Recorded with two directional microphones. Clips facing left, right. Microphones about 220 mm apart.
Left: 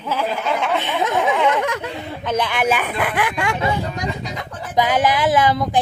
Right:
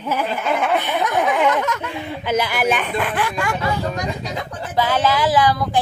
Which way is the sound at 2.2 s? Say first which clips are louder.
Even; 5° right (ahead or behind).